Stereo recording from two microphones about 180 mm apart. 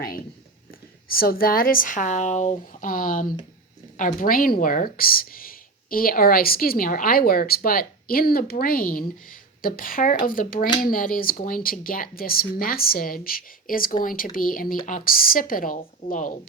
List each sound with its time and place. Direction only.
1.1 s speech: 55° left (ahead or behind)